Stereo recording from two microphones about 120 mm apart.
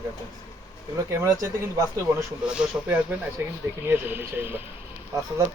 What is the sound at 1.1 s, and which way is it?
Speech, 25° right (ahead or behind).